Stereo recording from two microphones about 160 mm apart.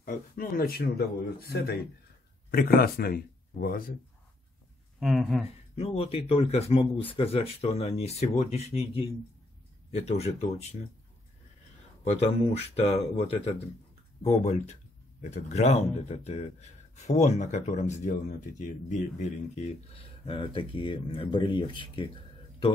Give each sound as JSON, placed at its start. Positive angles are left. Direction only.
{"t": 0.0, "sound": "speech", "side_deg": 65}
{"t": 5.0, "sound": "speech", "side_deg": 0}
{"t": 5.8, "sound": "speech", "side_deg": 40}
{"t": 12.0, "sound": "speech", "side_deg": 40}
{"t": 15.2, "sound": "speech", "side_deg": 45}